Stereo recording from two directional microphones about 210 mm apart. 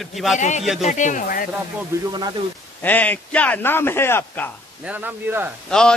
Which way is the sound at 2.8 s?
10° left (ahead or behind).